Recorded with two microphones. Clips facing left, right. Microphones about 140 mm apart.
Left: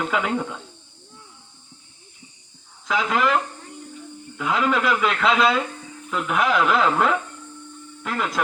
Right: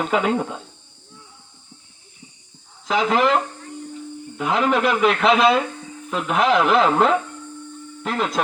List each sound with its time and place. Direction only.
0.0 s speech: 20° right (ahead or behind)
2.8 s speech: 25° right (ahead or behind)